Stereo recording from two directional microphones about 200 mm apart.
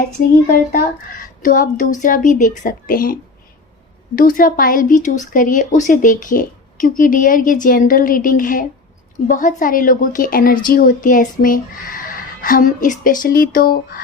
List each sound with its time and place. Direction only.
0.4 s speech: 45° left (ahead or behind)